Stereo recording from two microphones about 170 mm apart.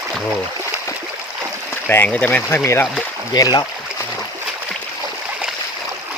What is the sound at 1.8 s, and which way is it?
Speech, 10° left (ahead or behind).